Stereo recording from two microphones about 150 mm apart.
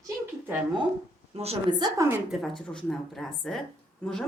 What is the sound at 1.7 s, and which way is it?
Speech, 30° right (ahead or behind).